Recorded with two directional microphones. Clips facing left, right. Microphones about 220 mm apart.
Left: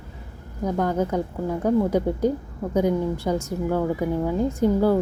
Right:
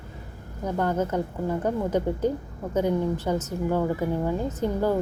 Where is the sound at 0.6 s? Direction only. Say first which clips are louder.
Left 2 dB; 10° left (ahead or behind).